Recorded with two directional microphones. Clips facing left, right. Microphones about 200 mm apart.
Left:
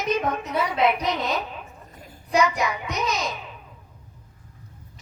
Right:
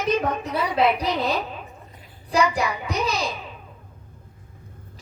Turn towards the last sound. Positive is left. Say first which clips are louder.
# right 2 dB
turn(degrees=-30)  # may be behind; listen again after turning